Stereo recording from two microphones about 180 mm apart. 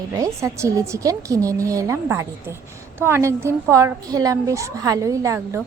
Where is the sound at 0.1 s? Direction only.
20° right (ahead or behind).